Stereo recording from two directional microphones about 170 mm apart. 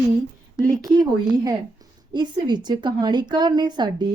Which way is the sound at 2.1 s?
25° right (ahead or behind).